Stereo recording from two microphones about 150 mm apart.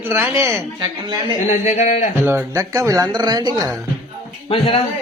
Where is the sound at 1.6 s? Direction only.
55° left (ahead or behind).